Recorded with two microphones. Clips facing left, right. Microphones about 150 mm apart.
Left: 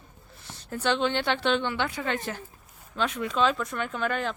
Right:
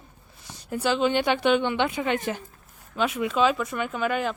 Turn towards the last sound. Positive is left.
turn(degrees=-5)  # may be behind; listen again after turning